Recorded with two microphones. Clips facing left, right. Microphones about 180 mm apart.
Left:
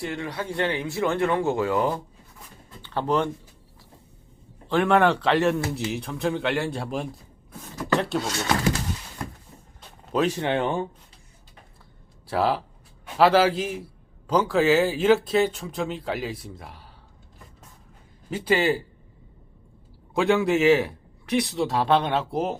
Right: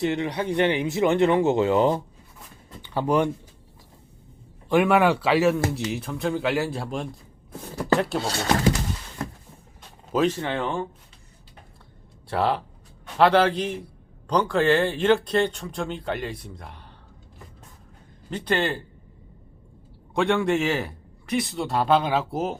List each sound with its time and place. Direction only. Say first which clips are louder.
0.0 s speech: right 6 dB; 20° right (ahead or behind)
2.8 s speech: right 2 dB; 10° right (ahead or behind)
4.7 s speech: right 1 dB; 10° right (ahead or behind)
8.2 s speech: right 2 dB; 30° right (ahead or behind)
10.2 s speech: left 1 dB; 20° left (ahead or behind)
12.3 s speech: even; centre (ahead or behind)
18.3 s speech: left 3 dB; 5° left (ahead or behind)
20.1 s speech: left 1 dB; 5° left (ahead or behind)